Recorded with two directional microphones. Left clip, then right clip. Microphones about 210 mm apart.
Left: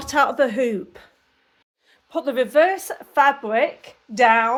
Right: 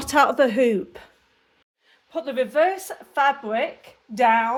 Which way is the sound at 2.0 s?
25° left (ahead or behind).